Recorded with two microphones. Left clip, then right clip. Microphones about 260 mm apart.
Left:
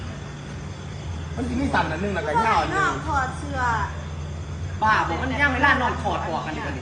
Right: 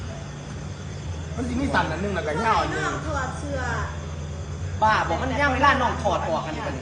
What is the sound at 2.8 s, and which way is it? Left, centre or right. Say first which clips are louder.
Speech: left 4 dB; centre.